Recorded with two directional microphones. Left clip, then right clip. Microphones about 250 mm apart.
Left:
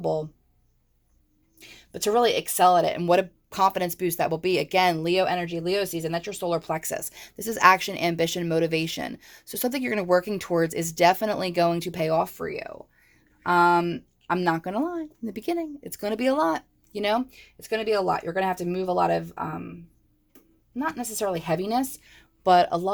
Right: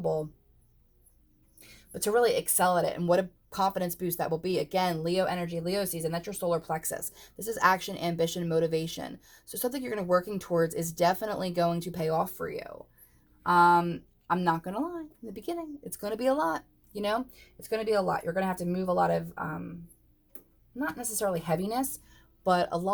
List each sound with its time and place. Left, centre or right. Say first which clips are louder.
0.0 s speech: left 3 dB; left
1.5 s speech: left 5 dB; left
20.7 s speech: left 5 dB; left